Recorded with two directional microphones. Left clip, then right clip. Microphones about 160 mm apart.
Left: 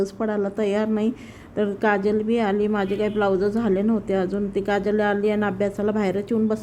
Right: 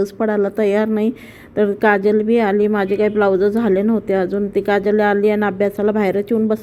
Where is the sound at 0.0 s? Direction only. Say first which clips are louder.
Right 7 dB; 30° right (ahead or behind).